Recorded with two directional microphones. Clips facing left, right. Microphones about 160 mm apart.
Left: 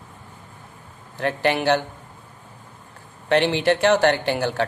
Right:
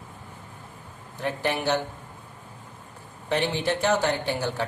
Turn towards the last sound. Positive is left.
turn(degrees=80)